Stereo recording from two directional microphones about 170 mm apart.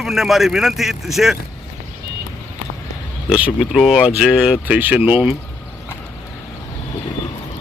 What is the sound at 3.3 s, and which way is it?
Speech, 5° right (ahead or behind).